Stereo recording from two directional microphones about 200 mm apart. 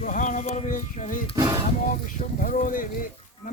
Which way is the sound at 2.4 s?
40° left (ahead or behind).